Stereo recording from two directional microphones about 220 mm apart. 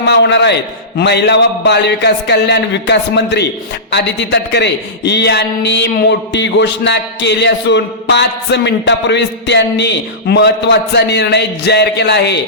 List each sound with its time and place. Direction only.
0.1 s a man's voice: 50° left (ahead or behind)